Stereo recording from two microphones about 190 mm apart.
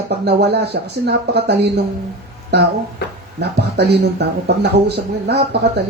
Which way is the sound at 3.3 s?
60° right (ahead or behind).